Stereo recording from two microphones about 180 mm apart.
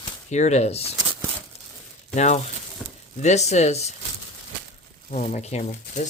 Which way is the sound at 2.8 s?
Centre (ahead or behind).